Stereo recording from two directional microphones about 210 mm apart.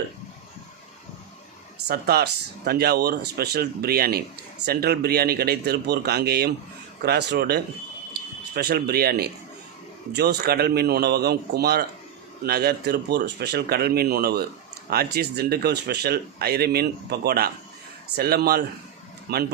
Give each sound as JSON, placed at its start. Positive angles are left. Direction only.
{"t": 1.9, "sound": "speech", "side_deg": -50}